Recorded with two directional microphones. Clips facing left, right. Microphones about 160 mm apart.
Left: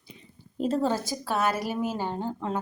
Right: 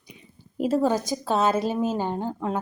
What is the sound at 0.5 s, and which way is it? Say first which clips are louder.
A woman's voice: right 4 dB; 10° right (ahead or behind).